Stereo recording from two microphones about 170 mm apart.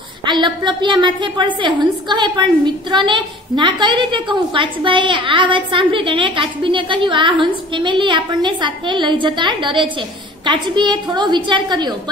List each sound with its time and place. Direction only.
0.2 s a woman's voice: 25° right (ahead or behind)